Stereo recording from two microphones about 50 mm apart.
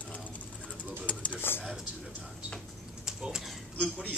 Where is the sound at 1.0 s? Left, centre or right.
Left.